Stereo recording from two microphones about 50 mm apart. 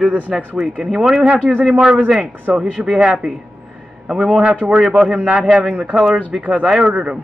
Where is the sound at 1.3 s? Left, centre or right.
Right.